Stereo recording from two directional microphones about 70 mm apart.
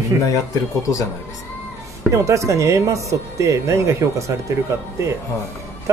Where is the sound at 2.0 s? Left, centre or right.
Right.